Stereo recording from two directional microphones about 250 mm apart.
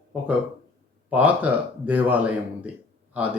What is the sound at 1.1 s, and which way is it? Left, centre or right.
Speech, centre.